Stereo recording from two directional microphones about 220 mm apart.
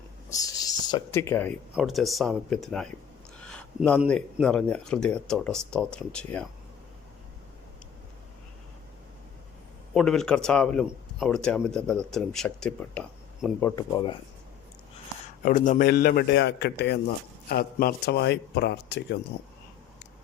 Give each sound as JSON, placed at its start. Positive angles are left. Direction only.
{"t": 0.3, "sound": "speech", "side_deg": 15}
{"t": 9.9, "sound": "speech", "side_deg": 0}
{"t": 15.4, "sound": "a man's voice", "side_deg": 35}